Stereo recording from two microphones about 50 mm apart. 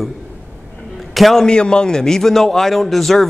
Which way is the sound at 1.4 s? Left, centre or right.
Centre.